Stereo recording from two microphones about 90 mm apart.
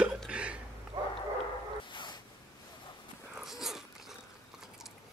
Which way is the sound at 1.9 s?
60° left (ahead or behind).